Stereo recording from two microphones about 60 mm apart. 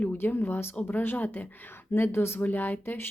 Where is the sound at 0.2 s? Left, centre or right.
Left.